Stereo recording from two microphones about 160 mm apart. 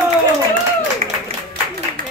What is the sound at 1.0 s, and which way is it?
Clapping, 45° right (ahead or behind).